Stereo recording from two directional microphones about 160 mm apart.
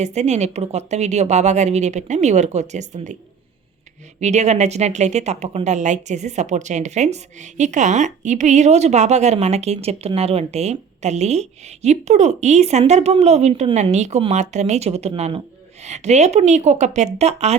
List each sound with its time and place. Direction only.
0.0 s speech: 45° right (ahead or behind)
4.2 s speech: 45° right (ahead or behind)